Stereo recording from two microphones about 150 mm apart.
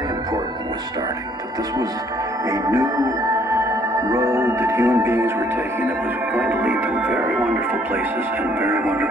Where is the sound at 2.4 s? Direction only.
20° right (ahead or behind).